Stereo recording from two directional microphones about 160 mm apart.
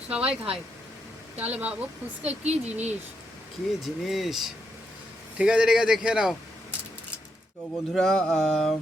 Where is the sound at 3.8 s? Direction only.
Centre (ahead or behind).